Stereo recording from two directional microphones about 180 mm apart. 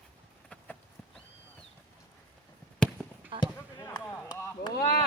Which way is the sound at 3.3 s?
30° right (ahead or behind).